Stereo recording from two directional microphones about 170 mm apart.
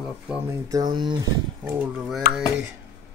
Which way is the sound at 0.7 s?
25° right (ahead or behind).